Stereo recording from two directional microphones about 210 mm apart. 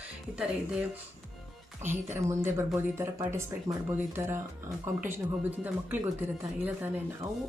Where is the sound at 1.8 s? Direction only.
10° right (ahead or behind).